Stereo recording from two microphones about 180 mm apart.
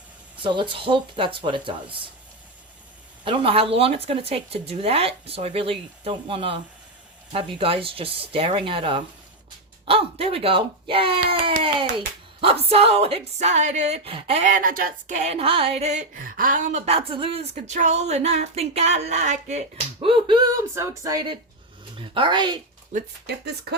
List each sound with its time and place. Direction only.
0.4 s speech: 25° right (ahead or behind)
3.2 s a child's voice: 30° right (ahead or behind)
20.7 s speech: 15° right (ahead or behind)
23.2 s speech: 65° right (ahead or behind)